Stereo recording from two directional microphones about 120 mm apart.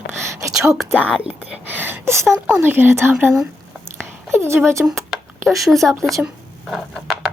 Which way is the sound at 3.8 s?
20° right (ahead or behind).